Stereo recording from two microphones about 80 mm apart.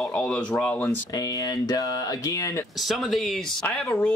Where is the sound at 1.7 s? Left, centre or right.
Left.